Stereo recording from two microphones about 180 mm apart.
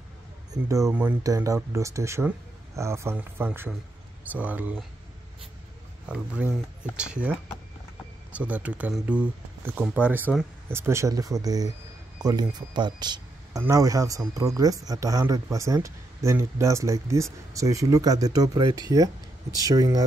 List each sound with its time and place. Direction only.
0.8 s speech: 10° right (ahead or behind)
6.0 s speech: 5° right (ahead or behind)